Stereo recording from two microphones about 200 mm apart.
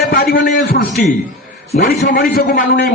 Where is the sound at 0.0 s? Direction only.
50° left (ahead or behind).